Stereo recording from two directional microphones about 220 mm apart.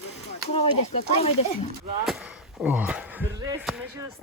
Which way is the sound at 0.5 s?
25° left (ahead or behind).